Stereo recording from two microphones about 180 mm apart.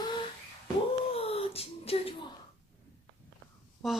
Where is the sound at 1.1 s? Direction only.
30° left (ahead or behind).